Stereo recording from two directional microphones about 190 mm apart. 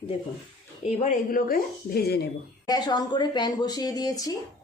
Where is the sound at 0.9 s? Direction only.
40° left (ahead or behind); by 2.2 s 55° left (ahead or behind).